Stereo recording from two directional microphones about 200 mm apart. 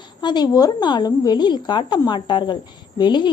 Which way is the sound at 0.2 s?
20° left (ahead or behind).